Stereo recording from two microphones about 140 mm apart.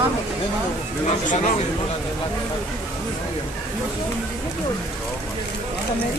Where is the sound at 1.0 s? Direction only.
65° left (ahead or behind).